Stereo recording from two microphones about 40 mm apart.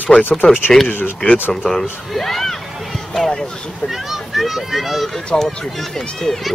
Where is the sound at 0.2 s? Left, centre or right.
Left.